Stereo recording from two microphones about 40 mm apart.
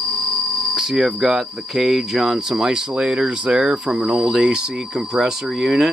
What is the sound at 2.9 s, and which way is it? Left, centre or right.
Speech, right.